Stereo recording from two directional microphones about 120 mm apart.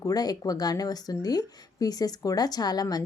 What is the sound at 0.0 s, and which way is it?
A woman's voice, 30° left (ahead or behind).